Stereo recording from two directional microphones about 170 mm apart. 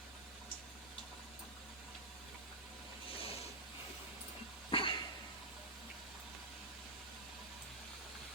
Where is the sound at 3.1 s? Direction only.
35° left (ahead or behind).